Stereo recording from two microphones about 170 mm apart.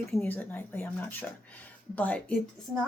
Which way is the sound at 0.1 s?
10° left (ahead or behind).